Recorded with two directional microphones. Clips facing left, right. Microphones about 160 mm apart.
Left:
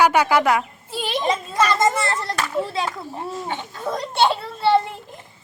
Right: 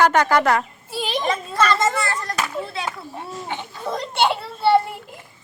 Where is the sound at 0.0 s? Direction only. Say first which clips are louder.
Even; 10° left (ahead or behind).